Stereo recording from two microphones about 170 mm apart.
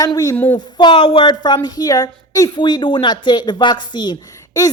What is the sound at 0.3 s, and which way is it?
Speech, 10° left (ahead or behind).